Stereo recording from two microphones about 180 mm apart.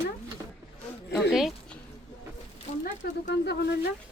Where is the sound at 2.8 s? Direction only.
65° left (ahead or behind).